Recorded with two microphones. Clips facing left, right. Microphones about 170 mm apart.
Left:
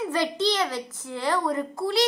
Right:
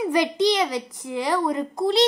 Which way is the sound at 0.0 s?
15° right (ahead or behind).